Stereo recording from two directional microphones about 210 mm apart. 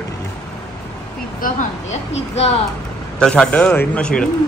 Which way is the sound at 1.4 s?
35° left (ahead or behind).